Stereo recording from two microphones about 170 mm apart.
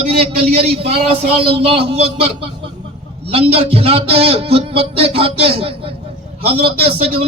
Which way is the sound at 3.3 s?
35° right (ahead or behind).